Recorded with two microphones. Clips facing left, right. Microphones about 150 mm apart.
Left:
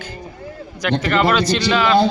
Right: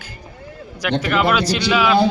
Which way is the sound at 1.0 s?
5° right (ahead or behind).